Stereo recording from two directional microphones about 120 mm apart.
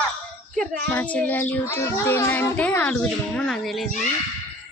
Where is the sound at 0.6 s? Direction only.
15° left (ahead or behind).